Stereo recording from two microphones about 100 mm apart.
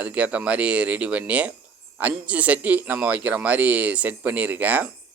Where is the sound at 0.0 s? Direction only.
15° right (ahead or behind).